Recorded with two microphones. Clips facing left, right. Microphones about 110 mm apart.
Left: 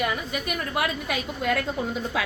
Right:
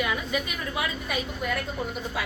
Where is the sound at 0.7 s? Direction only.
90° left.